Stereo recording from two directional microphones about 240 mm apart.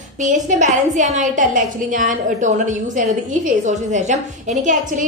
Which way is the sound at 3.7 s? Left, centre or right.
Right.